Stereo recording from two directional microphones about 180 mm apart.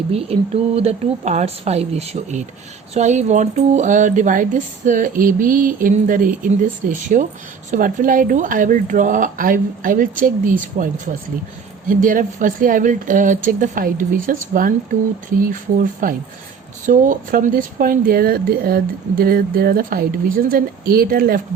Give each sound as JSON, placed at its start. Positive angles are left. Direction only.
{"t": 0.1, "sound": "a woman's voice", "side_deg": -35}